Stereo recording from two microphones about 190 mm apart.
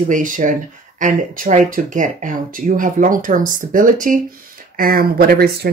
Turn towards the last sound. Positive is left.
turn(degrees=-55)  # may be behind; listen again after turning